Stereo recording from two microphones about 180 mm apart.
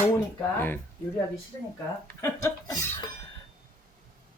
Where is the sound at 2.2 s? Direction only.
15° left (ahead or behind).